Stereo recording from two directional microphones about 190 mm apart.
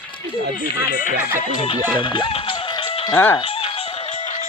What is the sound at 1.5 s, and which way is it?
Speech, 25° left (ahead or behind).